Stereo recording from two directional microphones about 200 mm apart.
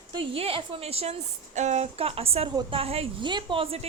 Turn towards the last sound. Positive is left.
turn(degrees=-30)  # may be behind; listen again after turning